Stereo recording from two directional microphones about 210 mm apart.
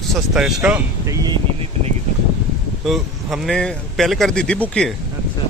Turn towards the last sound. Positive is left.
turn(degrees=5)  # may be behind; listen again after turning